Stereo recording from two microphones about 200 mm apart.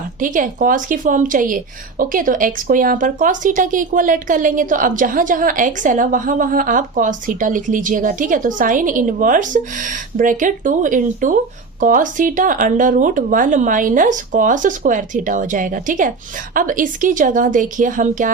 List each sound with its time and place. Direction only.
0.2 s a woman's voice: 40° right (ahead or behind)